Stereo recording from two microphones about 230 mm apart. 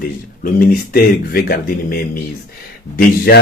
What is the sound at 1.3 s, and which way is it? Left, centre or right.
Speech, left.